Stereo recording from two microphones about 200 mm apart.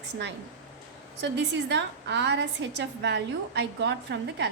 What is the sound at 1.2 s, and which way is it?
A woman's voice, 60° right (ahead or behind).